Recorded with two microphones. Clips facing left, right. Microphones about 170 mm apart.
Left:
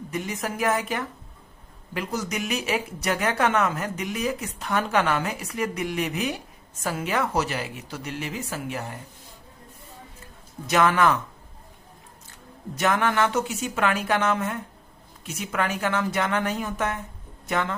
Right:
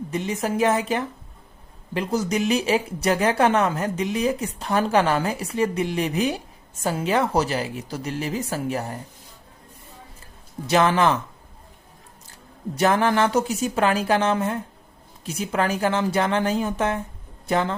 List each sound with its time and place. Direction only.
0.1 s a woman's voice: 30° right (ahead or behind)
10.7 s a woman's voice: 30° right (ahead or behind)
12.7 s speech: 35° right (ahead or behind)